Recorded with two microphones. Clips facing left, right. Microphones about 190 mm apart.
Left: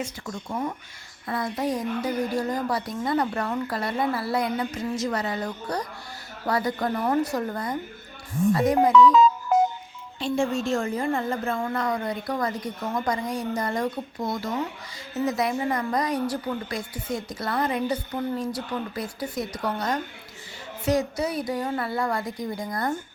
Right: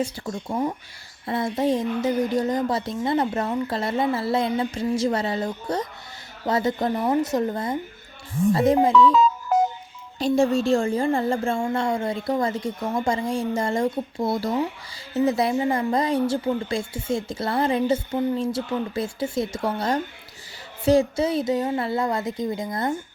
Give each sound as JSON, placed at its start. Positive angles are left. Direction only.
{"t": 0.0, "sound": "a woman's voice", "side_deg": -30}
{"t": 10.2, "sound": "a woman's voice", "side_deg": -40}